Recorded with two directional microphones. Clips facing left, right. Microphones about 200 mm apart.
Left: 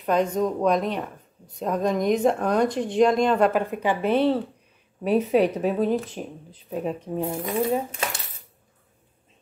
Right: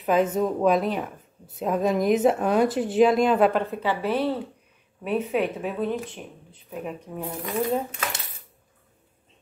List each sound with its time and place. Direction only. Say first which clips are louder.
0.0 s a woman's voice: even; 5° right (ahead or behind)
3.6 s a woman's voice: left 2 dB; 15° left (ahead or behind)
5.0 s speech: left 5 dB; 35° left (ahead or behind)